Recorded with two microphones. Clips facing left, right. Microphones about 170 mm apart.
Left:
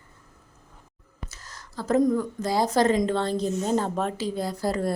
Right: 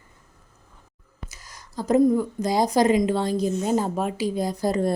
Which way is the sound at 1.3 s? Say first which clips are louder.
Left 1 dB; 10° right (ahead or behind).